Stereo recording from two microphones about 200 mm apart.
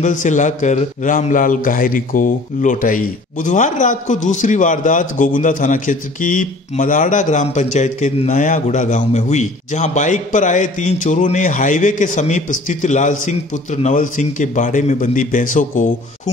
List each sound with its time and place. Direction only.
0.0 s a man's voice: 40° left (ahead or behind)